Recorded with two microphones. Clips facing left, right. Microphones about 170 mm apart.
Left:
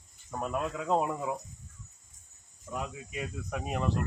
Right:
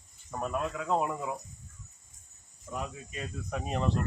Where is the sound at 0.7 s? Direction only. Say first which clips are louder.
Left 2 dB; 20° left (ahead or behind).